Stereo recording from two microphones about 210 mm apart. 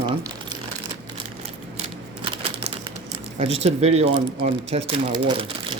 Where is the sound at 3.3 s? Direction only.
30° right (ahead or behind).